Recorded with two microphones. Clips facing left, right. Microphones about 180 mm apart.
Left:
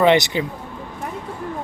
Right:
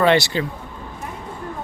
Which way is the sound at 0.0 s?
15° left (ahead or behind).